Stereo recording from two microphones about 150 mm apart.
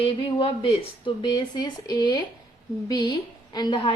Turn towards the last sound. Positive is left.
turn(degrees=35)  # may be behind; listen again after turning